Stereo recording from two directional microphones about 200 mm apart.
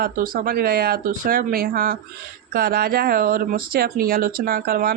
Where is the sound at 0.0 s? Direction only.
45° right (ahead or behind).